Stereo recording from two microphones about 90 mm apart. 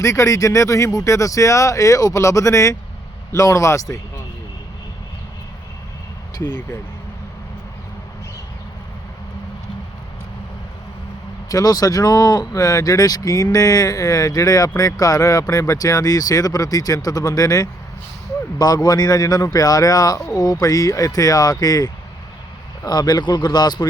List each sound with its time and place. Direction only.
0.0 s speech: 35° left (ahead or behind)
6.3 s speech: 50° left (ahead or behind)
11.4 s speech: 40° left (ahead or behind)